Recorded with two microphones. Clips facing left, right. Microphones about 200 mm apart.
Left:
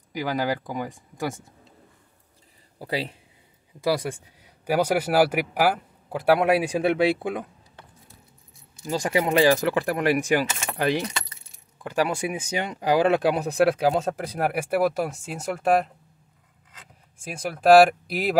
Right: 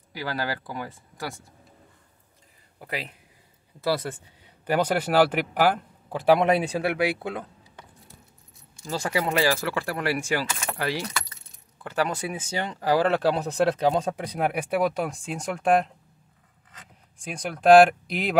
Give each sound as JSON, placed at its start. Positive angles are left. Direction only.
{"t": 0.1, "sound": "speech", "side_deg": 15}
{"t": 2.8, "sound": "speech", "side_deg": 30}
{"t": 3.8, "sound": "speech", "side_deg": 10}
{"t": 6.8, "sound": "speech", "side_deg": 20}
{"t": 8.8, "sound": "speech", "side_deg": 15}
{"t": 17.2, "sound": "speech", "side_deg": 5}